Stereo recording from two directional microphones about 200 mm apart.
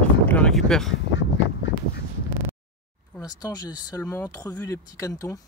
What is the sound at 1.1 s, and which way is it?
Duck, 65° left (ahead or behind).